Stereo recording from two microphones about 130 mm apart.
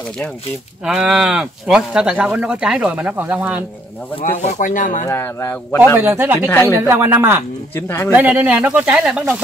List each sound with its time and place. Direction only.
0.8 s speech: 5° right (ahead or behind)
4.3 s speech: 60° left (ahead or behind); by 5.0 s 80° left
5.0 s speech: 20° left (ahead or behind)
5.9 s speech: 15° right (ahead or behind)
6.5 s speech: 20° left (ahead or behind)
6.9 s speech: 20° right (ahead or behind)
7.7 s speech: 20° left (ahead or behind)
8.1 s speech: 15° right (ahead or behind)